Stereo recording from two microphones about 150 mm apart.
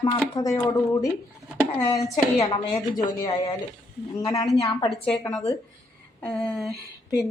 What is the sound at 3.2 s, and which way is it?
Speech, 25° left (ahead or behind).